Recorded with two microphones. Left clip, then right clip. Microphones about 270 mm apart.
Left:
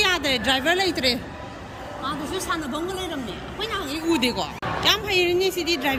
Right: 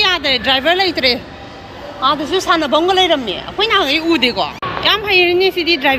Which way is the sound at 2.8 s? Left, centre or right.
Right.